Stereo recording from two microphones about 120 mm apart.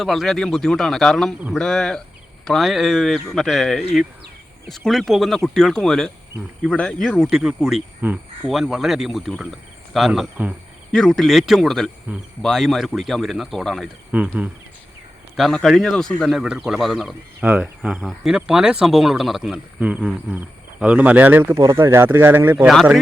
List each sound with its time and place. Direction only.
0.0 s speech: centre (ahead or behind)
7.2 s speech: 5° right (ahead or behind)
14.1 s speech: 10° right (ahead or behind)
15.4 s speech: centre (ahead or behind)
16.4 s speech: 5° right (ahead or behind)
22.6 s speech: centre (ahead or behind)